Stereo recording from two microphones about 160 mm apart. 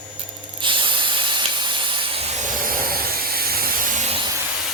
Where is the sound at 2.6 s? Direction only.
70° right (ahead or behind).